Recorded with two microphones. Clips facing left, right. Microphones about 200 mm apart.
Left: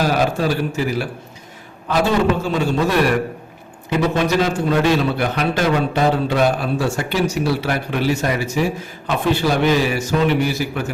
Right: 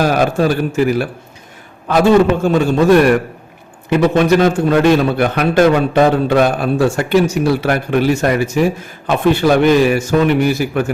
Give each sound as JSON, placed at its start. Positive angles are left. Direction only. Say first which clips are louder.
{"t": 0.0, "sound": "a man's voice", "louder": "right 4 dB", "side_deg": -50}
{"t": 2.4, "sound": "a man's voice", "louder": "right 6 dB", "side_deg": -50}